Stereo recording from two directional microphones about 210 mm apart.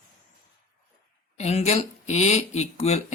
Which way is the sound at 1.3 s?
30° left (ahead or behind).